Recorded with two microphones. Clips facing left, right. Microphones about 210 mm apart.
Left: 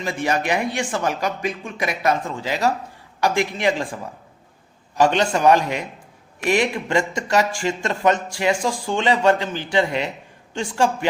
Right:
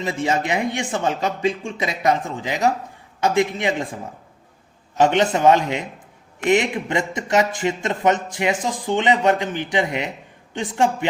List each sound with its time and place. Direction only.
0.0 s speech: 25° right (ahead or behind)
4.9 s speech: 20° right (ahead or behind)